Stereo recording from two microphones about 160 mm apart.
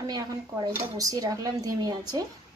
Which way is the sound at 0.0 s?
25° right (ahead or behind).